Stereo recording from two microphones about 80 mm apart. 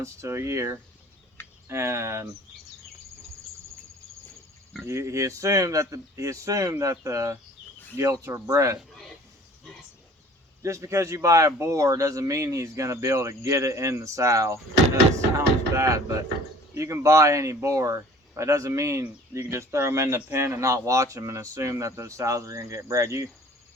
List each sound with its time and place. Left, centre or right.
0.0 s speech: right
4.9 s speech: right
10.6 s speech: right
15.4 s mechanisms: right
16.7 s speech: right